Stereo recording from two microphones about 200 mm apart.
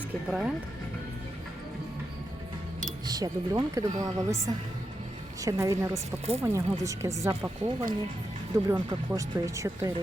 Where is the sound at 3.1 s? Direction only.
20° right (ahead or behind).